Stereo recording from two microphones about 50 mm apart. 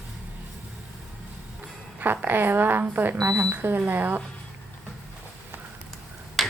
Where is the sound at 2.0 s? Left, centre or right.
Right.